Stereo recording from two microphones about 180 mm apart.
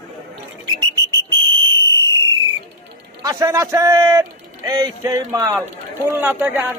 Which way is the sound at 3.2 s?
15° right (ahead or behind).